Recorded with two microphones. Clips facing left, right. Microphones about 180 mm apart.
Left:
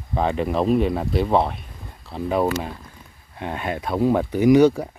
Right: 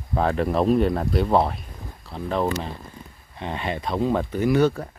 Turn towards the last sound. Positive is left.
turn(degrees=15)  # may be behind; listen again after turning